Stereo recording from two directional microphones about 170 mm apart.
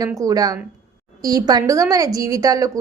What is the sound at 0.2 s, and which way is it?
A woman's voice, 20° right (ahead or behind).